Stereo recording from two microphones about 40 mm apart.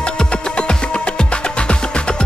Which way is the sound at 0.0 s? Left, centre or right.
Left.